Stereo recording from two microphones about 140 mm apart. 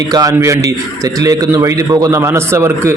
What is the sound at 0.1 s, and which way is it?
A man's voice, 25° right (ahead or behind).